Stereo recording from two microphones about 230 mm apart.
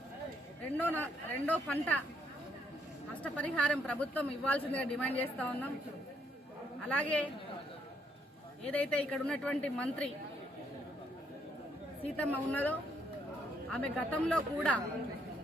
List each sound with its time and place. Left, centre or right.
0.8 s a man's voice: centre
3.2 s a man's voice: centre
6.8 s a woman's voice: centre
8.7 s a woman's voice: centre
12.0 s a man's voice: centre